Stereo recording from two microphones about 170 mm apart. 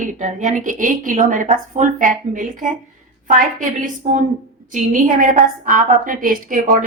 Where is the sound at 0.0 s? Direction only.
45° right (ahead or behind).